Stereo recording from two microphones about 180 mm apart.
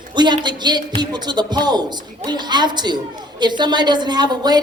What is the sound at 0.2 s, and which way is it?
Speech, 25° right (ahead or behind).